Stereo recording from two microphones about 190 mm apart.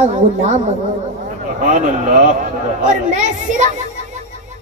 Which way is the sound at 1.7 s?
40° right (ahead or behind).